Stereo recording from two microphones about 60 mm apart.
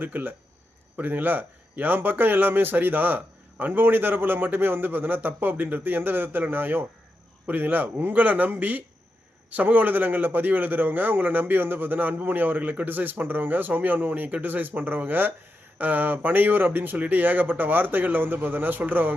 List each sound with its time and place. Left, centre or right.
0.0 s a man's voice: right